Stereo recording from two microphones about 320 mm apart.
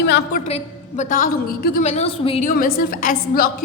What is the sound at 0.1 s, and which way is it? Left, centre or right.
A woman's voice, left.